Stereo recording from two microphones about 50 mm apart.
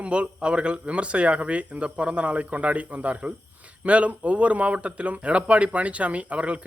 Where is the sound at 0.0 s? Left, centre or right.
Right.